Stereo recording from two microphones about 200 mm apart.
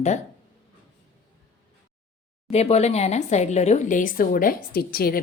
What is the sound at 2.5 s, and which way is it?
Speech, 30° left (ahead or behind).